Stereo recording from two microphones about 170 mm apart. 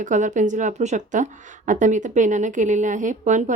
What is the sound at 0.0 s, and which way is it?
A woman's voice, 45° right (ahead or behind).